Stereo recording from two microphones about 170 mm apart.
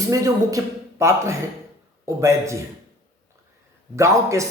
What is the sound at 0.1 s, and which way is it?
Speech, 20° right (ahead or behind).